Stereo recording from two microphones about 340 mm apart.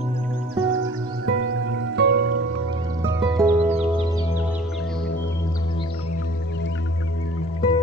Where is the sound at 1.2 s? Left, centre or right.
Right.